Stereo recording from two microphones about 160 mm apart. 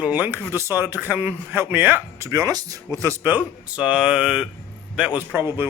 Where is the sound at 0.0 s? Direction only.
10° right (ahead or behind).